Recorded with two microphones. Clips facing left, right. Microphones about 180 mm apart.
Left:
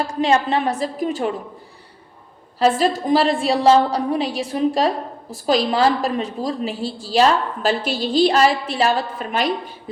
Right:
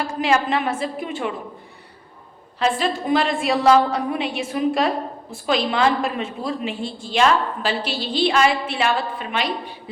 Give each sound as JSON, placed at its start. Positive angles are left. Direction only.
{"t": 0.1, "sound": "a woman's voice", "side_deg": 35}
{"t": 2.6, "sound": "a woman's voice", "side_deg": 40}